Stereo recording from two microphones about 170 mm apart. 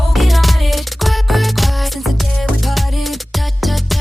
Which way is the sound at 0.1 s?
Centre (ahead or behind).